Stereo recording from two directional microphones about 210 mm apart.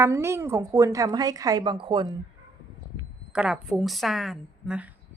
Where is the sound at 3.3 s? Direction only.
5° right (ahead or behind).